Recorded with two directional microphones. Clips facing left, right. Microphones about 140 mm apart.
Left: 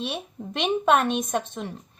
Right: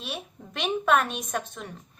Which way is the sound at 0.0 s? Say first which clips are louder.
Left 6 dB; 25° left (ahead or behind).